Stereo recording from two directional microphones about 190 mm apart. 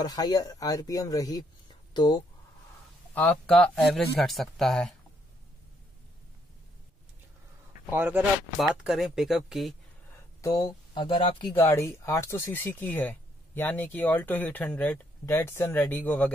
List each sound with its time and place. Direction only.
0.0 s speech: 20° left (ahead or behind)
3.2 s speech: 5° left (ahead or behind)
7.9 s speech: 10° right (ahead or behind)
10.4 s speech: 20° left (ahead or behind)
11.5 s speech: 15° left (ahead or behind)